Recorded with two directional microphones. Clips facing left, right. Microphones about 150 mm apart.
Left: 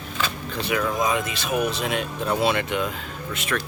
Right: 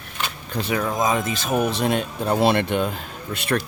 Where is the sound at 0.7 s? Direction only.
40° right (ahead or behind).